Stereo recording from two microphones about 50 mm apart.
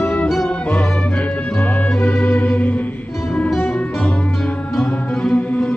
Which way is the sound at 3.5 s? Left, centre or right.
Centre.